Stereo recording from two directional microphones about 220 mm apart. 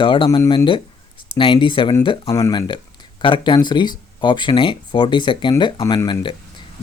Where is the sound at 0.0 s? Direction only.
25° left (ahead or behind).